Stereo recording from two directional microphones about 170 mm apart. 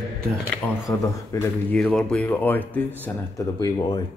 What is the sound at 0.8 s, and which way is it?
Speech, 15° left (ahead or behind).